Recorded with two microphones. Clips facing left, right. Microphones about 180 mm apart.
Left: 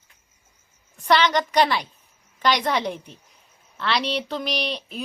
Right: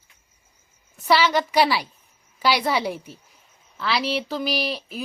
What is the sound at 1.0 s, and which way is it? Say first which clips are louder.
A woman's voice: even; 5° right (ahead or behind).